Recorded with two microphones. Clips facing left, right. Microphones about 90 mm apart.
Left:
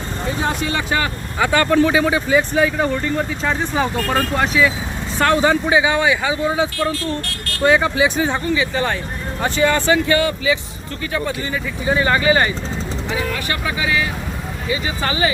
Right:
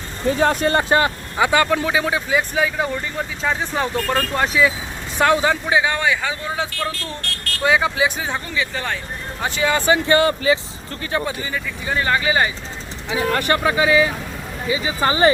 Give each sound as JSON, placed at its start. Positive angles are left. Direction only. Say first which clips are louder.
{"t": 0.3, "sound": "speech", "louder": "right 5 dB", "side_deg": -50}
{"t": 1.4, "sound": "speech", "louder": "even", "side_deg": -15}
{"t": 1.6, "sound": "speech", "louder": "left 5 dB", "side_deg": -5}
{"t": 5.5, "sound": "speech", "louder": "left 3 dB", "side_deg": 0}
{"t": 10.1, "sound": "speech", "louder": "right 1 dB", "side_deg": -35}
{"t": 11.9, "sound": "speech", "louder": "left 2 dB", "side_deg": 5}
{"t": 13.3, "sound": "speech", "louder": "right 5 dB", "side_deg": -45}
{"t": 13.8, "sound": "speech", "louder": "right 4 dB", "side_deg": -20}